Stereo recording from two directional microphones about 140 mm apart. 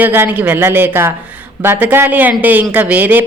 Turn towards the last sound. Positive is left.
turn(degrees=-10)  # may be behind; listen again after turning